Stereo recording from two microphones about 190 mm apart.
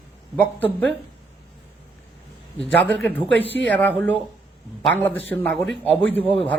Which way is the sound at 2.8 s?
10° left (ahead or behind).